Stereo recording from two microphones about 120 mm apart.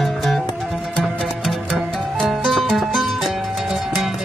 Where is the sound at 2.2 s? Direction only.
5° left (ahead or behind).